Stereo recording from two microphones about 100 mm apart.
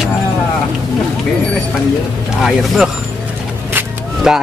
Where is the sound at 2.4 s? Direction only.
Centre (ahead or behind).